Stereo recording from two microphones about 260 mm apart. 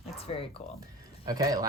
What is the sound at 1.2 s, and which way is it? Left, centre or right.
Speech, centre.